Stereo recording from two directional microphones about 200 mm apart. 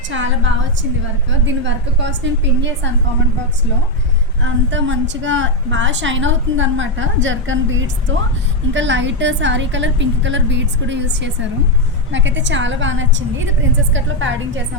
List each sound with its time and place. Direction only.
0.1 s a woman's voice: 70° right (ahead or behind)
4.4 s a woman's voice: 70° right (ahead or behind)